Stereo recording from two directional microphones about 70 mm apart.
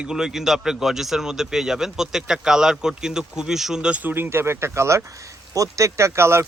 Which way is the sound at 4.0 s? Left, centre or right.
Right.